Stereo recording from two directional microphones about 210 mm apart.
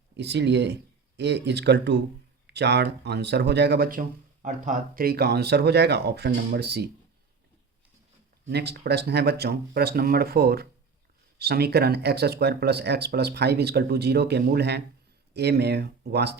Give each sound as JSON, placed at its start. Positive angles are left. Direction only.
{"t": 0.2, "sound": "speech", "side_deg": -55}
{"t": 8.4, "sound": "speech", "side_deg": -50}